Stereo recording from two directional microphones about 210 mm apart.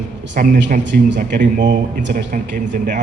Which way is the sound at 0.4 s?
40° right (ahead or behind).